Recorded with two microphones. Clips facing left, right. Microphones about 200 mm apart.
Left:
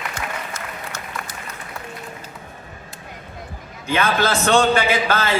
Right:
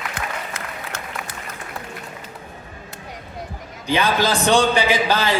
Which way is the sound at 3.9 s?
15° right (ahead or behind).